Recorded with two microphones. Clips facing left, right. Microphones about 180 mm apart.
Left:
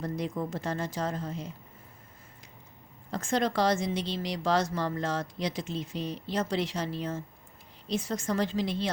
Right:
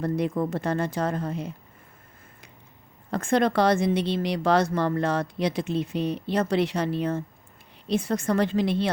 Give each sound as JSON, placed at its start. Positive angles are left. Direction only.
{"t": 0.0, "sound": "speech", "side_deg": -60}
{"t": 3.1, "sound": "speech", "side_deg": -60}